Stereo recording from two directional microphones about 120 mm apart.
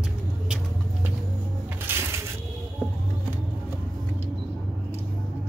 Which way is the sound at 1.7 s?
20° right (ahead or behind).